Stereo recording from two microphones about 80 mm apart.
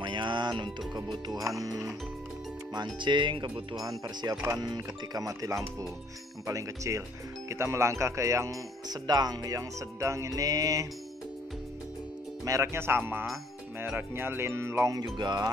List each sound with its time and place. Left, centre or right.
0.0 s music: right
1.6 s music: right
2.7 s speech: right
4.0 s music: right
6.4 s speech: right
8.8 s music: right
12.6 s speech: right
15.1 s music: right